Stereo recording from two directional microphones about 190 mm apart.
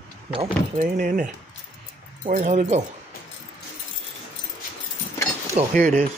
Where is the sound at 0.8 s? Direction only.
40° right (ahead or behind).